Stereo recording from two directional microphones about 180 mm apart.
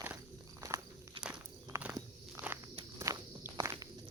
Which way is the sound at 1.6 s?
10° right (ahead or behind).